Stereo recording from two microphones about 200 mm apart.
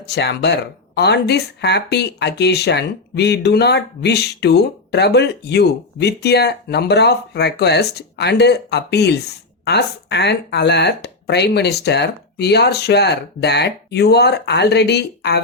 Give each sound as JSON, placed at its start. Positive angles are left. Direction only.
{"t": 0.0, "sound": "speech", "side_deg": 55}